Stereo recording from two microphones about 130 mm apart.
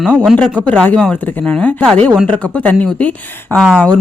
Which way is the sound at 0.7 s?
10° left (ahead or behind).